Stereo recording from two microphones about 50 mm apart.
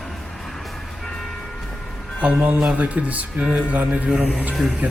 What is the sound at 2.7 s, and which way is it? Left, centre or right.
A man's voice, right.